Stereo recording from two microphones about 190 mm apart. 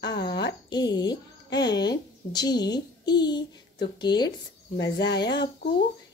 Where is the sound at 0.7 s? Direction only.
20° left (ahead or behind).